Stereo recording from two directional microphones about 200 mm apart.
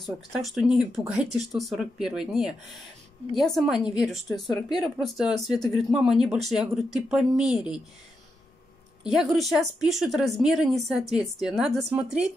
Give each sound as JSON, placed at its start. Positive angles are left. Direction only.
{"t": 0.0, "sound": "speech", "side_deg": 0}
{"t": 4.3, "sound": "speech", "side_deg": 20}
{"t": 4.8, "sound": "speech", "side_deg": 0}
{"t": 9.1, "sound": "speech", "side_deg": 0}